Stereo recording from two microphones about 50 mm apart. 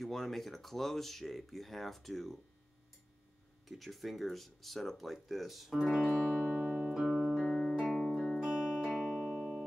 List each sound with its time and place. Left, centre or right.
0.0 s speech: centre
3.6 s speech: centre
6.2 s music: centre
7.1 s music: centre
8.4 s music: centre